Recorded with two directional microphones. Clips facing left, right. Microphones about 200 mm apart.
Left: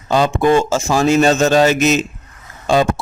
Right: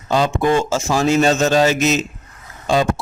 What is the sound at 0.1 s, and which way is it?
A man's voice, 55° left (ahead or behind).